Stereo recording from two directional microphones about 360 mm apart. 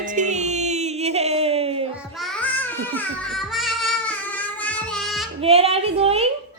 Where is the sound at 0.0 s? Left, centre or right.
Right.